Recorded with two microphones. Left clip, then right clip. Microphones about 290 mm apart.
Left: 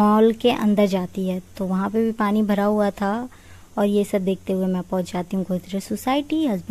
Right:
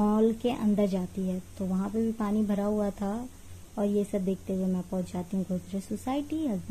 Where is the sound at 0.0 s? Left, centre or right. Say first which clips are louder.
Left 10 dB; left.